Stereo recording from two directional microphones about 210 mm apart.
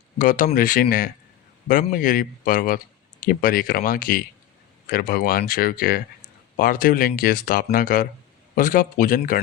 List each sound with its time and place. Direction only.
0.2 s speech: 40° left (ahead or behind)